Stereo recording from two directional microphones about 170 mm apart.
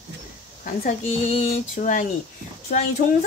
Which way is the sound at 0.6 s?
50° left (ahead or behind).